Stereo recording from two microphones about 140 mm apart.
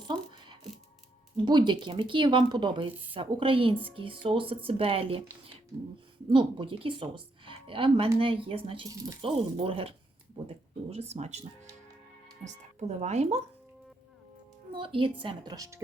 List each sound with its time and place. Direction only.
0.1 s ratchet: 30° right (ahead or behind)
1.5 s speech: 30° right (ahead or behind)
6.2 s a woman's voice: 40° right (ahead or behind)
13.0 s speech: 50° right (ahead or behind)
14.7 s speech: 35° right (ahead or behind)
15.5 s speech: 25° right (ahead or behind)